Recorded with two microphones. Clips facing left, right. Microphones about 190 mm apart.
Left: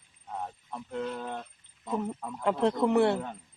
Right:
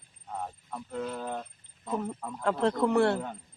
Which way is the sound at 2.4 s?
15° left (ahead or behind).